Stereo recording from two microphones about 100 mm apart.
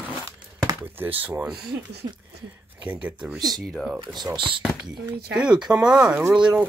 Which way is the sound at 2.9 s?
15° right (ahead or behind).